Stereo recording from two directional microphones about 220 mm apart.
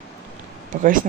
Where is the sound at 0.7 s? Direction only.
35° right (ahead or behind).